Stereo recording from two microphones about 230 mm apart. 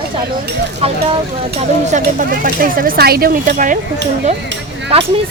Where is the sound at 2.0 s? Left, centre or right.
Right.